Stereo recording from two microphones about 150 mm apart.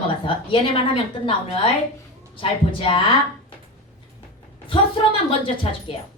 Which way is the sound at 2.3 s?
35° left (ahead or behind).